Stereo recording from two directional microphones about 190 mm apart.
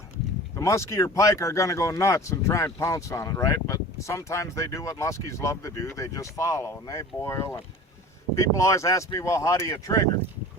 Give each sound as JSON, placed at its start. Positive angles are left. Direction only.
{"t": 0.5, "sound": "speech", "side_deg": 15}